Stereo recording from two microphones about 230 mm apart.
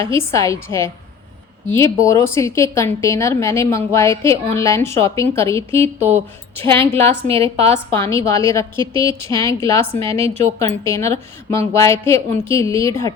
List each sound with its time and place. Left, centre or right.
0.0 s a woman's voice: centre
5.8 s speech: right
6.7 s a woman's voice: centre
7.3 s speech: right
7.9 s a woman's voice: centre
8.8 s speech: right
9.0 s a woman's voice: centre